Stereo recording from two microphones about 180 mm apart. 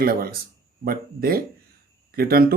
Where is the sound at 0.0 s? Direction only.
55° right (ahead or behind).